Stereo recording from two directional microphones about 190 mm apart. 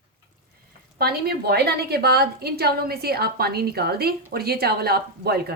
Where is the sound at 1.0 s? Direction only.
55° right (ahead or behind).